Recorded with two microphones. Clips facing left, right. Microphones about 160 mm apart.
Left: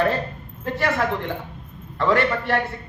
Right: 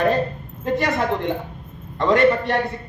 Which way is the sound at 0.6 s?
20° right (ahead or behind).